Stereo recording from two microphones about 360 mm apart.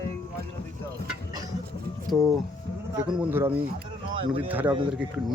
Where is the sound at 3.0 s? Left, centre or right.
Centre.